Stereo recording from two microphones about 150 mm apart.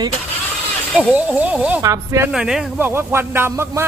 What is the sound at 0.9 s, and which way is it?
Speech, 10° right (ahead or behind).